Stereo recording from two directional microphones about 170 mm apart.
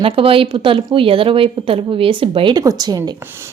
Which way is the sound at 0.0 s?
35° right (ahead or behind).